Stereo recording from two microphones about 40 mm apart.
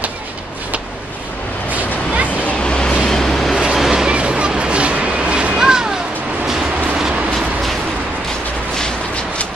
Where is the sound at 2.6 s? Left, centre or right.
Left.